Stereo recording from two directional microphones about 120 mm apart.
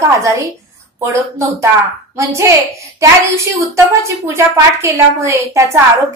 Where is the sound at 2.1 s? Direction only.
25° right (ahead or behind).